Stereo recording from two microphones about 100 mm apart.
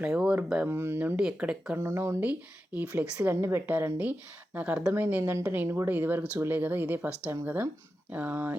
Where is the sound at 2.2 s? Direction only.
15° right (ahead or behind).